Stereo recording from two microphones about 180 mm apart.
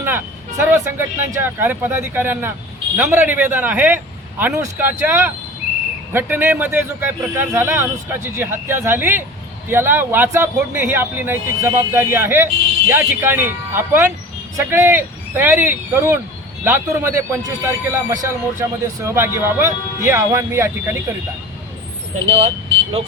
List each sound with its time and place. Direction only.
0.0 s a man's voice: 15° right (ahead or behind)
22.4 s speech: 30° right (ahead or behind)